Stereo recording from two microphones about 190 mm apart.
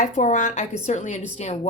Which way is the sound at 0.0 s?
40° left (ahead or behind).